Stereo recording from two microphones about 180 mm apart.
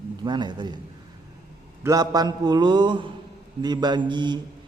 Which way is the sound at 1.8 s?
20° right (ahead or behind).